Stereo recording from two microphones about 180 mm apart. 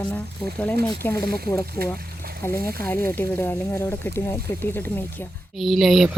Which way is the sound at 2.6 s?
10° left (ahead or behind).